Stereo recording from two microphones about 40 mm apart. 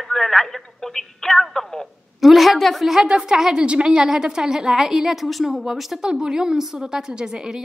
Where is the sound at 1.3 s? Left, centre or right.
Centre.